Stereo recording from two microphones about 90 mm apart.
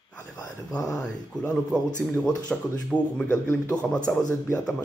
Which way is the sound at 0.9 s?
10° left (ahead or behind).